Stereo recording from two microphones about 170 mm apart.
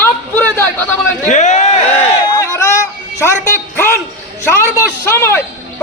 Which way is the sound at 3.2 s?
15° left (ahead or behind).